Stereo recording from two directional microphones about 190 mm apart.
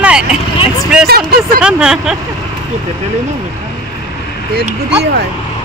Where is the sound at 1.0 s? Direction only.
55° right (ahead or behind).